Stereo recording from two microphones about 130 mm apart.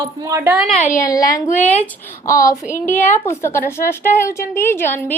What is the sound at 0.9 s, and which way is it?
Speech, 25° left (ahead or behind).